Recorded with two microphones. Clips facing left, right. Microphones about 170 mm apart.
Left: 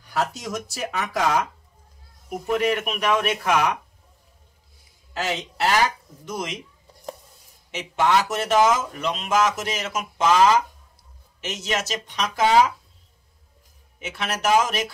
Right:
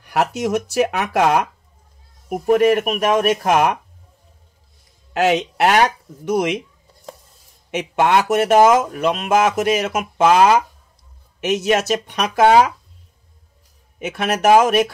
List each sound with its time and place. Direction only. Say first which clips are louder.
0.0 s speech: right 7 dB; 70° right (ahead or behind)
2.2 s speech: right 8 dB; 50° right (ahead or behind)
5.1 s speech: right 11 dB; 65° right (ahead or behind)
7.7 s speech: right 4 dB; 60° right (ahead or behind)
13.9 s speech: right 8 dB; 55° right (ahead or behind)